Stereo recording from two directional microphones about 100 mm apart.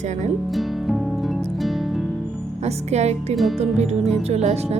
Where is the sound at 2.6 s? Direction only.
90° right.